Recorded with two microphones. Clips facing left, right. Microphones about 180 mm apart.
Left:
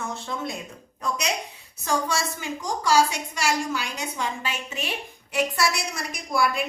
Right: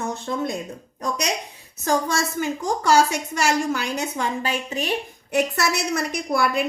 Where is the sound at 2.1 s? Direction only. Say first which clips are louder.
Right 5 dB; 55° right (ahead or behind).